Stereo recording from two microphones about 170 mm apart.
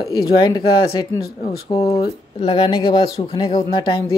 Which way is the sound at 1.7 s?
20° left (ahead or behind).